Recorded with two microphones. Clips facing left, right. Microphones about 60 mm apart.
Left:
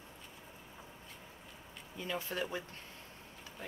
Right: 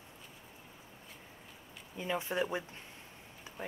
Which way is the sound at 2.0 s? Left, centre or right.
Right.